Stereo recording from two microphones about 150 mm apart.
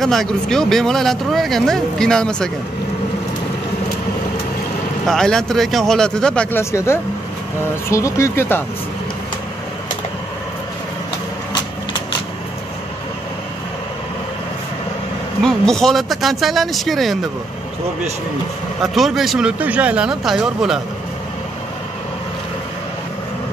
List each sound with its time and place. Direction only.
0.0 s speech: centre (ahead or behind)
5.0 s speech: 5° left (ahead or behind)
6.6 s speech: 20° left (ahead or behind)
15.4 s speech: 5° left (ahead or behind)
18.8 s speech: centre (ahead or behind)